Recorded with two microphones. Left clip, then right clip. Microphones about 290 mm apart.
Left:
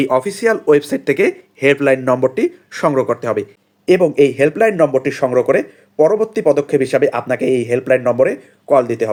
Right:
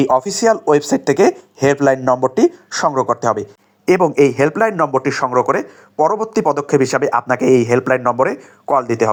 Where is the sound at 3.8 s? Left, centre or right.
Centre.